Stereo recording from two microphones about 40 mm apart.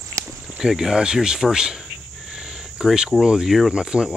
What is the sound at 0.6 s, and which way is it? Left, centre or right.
Speech, centre.